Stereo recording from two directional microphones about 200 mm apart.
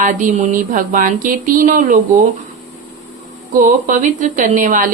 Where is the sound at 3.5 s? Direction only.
40° right (ahead or behind).